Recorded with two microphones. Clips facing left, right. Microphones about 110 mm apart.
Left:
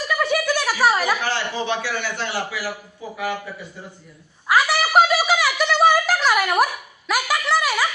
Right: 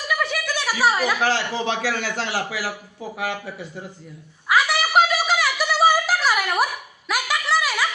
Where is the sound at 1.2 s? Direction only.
90° right.